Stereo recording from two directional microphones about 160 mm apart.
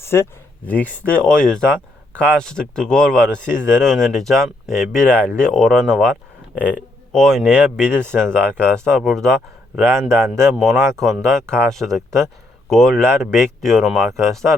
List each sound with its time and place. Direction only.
0.0 s speech: 15° left (ahead or behind); by 6.1 s centre (ahead or behind)
7.1 s speech: 5° left (ahead or behind)
9.8 s speech: 15° right (ahead or behind)
10.5 s speech: centre (ahead or behind)